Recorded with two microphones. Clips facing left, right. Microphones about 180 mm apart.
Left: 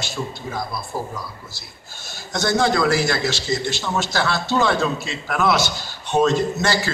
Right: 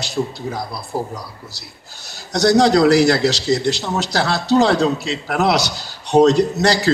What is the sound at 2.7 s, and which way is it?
A man's voice, 75° right (ahead or behind).